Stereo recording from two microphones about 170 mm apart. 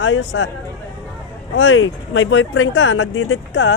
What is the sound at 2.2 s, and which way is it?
A man's voice, 90° left.